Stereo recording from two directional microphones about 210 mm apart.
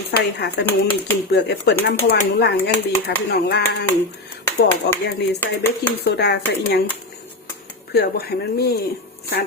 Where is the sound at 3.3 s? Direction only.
50° left (ahead or behind).